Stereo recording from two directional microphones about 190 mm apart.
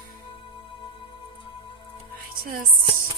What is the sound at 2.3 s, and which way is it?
Music, 50° right (ahead or behind).